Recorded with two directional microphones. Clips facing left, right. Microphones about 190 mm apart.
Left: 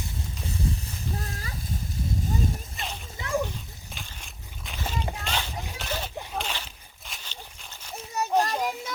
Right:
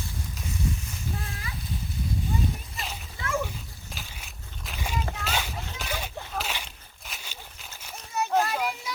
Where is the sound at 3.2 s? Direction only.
20° left (ahead or behind).